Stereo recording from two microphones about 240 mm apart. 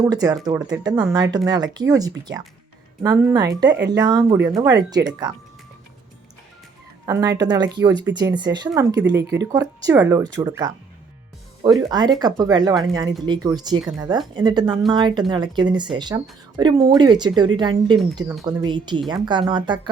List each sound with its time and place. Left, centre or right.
0.0 s speech: centre
3.7 s speech: right
3.9 s speech: centre
7.0 s speech: centre